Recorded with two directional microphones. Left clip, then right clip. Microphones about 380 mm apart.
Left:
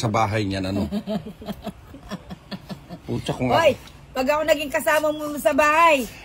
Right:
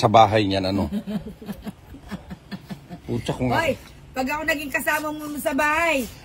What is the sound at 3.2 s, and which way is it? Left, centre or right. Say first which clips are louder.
Speech: left 1 dB; centre.